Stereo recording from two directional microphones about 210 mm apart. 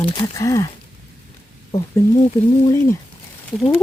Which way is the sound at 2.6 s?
15° left (ahead or behind).